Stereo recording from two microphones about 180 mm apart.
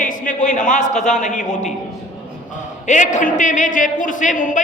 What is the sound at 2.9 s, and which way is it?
A woman's voice, 45° left (ahead or behind).